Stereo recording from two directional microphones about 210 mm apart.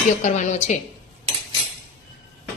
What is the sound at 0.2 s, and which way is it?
Speech, 35° left (ahead or behind).